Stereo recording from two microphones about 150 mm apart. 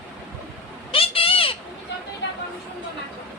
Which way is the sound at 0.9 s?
40° left (ahead or behind).